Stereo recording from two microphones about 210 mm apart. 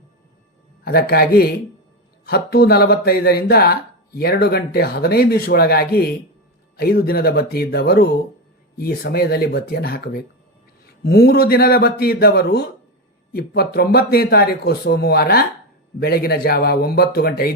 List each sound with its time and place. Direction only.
0.9 s speech: 45° left (ahead or behind)